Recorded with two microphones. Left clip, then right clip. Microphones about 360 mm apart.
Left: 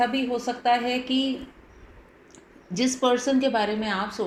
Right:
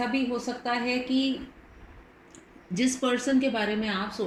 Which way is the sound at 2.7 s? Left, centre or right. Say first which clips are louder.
Left 4 dB; centre.